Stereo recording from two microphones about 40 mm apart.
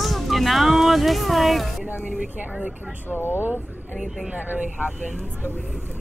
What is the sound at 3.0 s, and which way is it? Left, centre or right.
Speech, left.